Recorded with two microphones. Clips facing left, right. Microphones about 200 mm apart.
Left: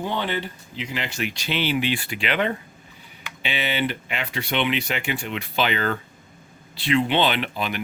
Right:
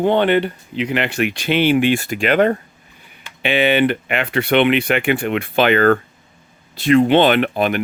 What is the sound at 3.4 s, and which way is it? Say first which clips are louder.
Speech: right 10 dB; 55° right (ahead or behind).